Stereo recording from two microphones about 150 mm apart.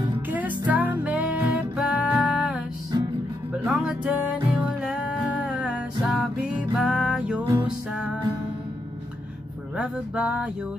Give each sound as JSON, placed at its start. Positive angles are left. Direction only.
{"t": 0.7, "sound": "music", "side_deg": -10}
{"t": 3.6, "sound": "music", "side_deg": -5}
{"t": 9.8, "sound": "music", "side_deg": -10}